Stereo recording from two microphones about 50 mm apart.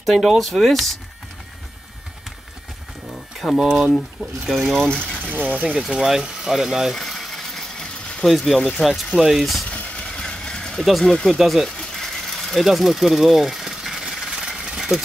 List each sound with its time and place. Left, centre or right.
0.0 s speech: centre
3.5 s speech: centre
4.5 s speech: centre
4.8 s speech: centre
5.3 s speech: right
5.8 s speech: centre
6.9 s engine: centre
8.3 s speech: centre
9.7 s vehicle: left
10.0 s a sound: centre
10.9 s speech: centre
11.8 s sewing machine: centre